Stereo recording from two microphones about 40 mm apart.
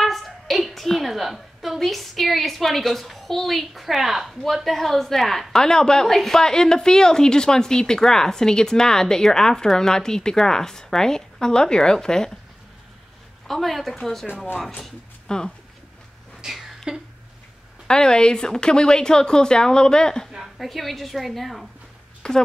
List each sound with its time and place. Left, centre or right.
0.0 s a woman's voice: centre
5.5 s a woman's voice: centre
13.5 s a woman's voice: centre
16.5 s a sound: centre
17.8 s speech: centre
20.5 s a woman's voice: centre
22.2 s a woman's voice: centre